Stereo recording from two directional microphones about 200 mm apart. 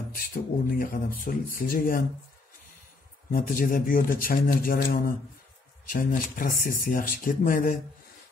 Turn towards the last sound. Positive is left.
turn(degrees=45)  # may be behind; listen again after turning